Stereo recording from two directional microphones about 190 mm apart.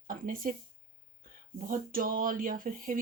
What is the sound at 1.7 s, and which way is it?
Speech, 45° right (ahead or behind).